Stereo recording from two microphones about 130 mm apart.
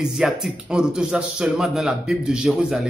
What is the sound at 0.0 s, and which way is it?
A man's voice, centre (ahead or behind).